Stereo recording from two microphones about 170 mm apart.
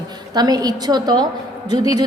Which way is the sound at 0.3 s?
25° right (ahead or behind).